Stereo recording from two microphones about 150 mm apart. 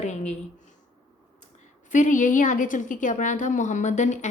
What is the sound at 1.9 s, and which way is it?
A woman's voice, 55° left (ahead or behind).